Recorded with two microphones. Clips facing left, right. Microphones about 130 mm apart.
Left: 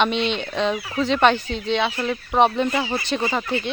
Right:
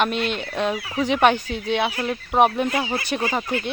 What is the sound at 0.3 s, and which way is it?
Speech, 5° right (ahead or behind).